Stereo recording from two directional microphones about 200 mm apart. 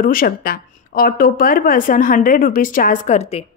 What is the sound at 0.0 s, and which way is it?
A woman's voice, 45° left (ahead or behind).